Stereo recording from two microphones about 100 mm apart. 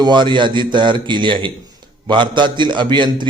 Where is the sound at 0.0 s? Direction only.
50° right (ahead or behind).